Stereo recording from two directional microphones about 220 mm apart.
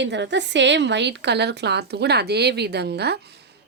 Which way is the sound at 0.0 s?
55° right (ahead or behind).